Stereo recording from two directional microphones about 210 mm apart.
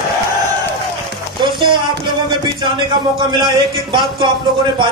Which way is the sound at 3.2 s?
20° right (ahead or behind).